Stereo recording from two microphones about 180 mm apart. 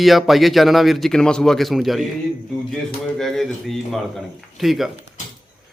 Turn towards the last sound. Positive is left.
turn(degrees=0)  # may be behind; listen again after turning